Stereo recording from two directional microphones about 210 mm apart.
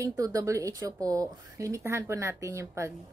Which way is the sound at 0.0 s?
15° right (ahead or behind).